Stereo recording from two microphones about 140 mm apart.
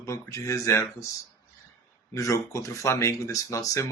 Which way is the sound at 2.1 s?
20° left (ahead or behind).